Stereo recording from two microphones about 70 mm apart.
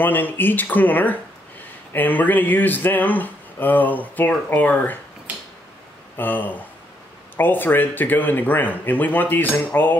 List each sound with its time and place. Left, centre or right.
0.0 s speech: left
6.1 s speech: left